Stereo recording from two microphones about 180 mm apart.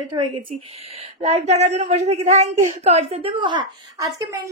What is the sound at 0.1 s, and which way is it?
Speech, 20° right (ahead or behind).